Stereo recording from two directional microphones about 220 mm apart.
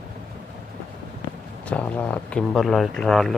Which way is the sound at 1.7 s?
5° left (ahead or behind).